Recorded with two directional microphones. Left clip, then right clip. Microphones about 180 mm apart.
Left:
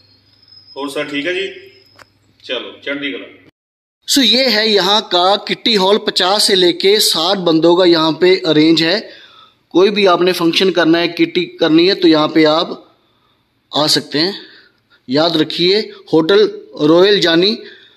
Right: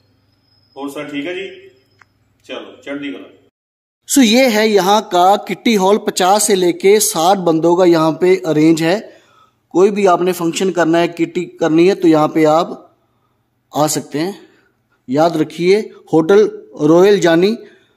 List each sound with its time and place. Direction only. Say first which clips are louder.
0.7 s a man's voice: left 4 dB; 5° right (ahead or behind)
4.2 s a man's voice: right 1 dB; 15° right (ahead or behind)
16.4 s a man's voice: left 1 dB; 20° right (ahead or behind)